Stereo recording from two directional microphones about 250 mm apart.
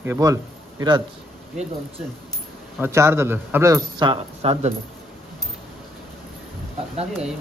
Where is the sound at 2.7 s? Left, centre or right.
Centre.